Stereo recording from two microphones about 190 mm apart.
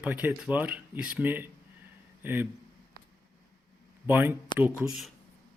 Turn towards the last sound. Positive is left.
turn(degrees=-10)  # may be behind; listen again after turning